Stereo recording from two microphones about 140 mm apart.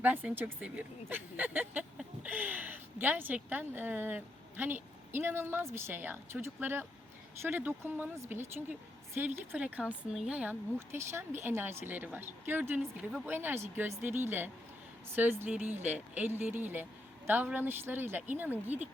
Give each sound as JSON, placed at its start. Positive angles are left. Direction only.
{"t": 0.0, "sound": "speech", "side_deg": -10}